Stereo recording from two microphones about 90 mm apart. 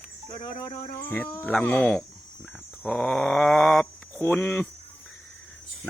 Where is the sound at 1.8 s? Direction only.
5° left (ahead or behind).